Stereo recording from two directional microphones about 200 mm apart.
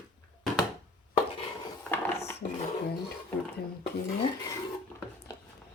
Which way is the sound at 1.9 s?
10° left (ahead or behind).